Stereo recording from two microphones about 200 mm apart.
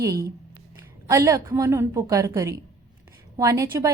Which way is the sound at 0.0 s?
15° right (ahead or behind).